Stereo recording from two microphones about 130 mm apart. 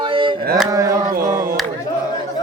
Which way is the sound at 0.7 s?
25° right (ahead or behind).